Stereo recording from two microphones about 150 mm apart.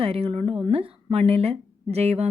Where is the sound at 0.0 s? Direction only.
40° right (ahead or behind).